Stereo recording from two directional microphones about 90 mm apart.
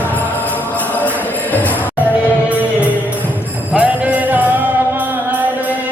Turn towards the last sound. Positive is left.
turn(degrees=-15)  # may be behind; listen again after turning